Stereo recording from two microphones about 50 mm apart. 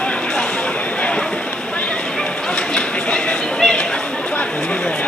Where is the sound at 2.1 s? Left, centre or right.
Centre.